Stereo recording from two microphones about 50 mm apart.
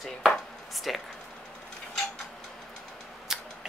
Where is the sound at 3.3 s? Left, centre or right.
Centre.